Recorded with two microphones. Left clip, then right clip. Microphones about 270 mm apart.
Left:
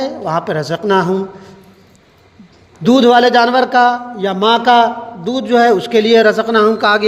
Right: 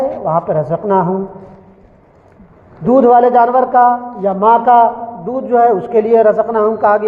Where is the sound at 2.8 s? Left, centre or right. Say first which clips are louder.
Right 1 dB; left.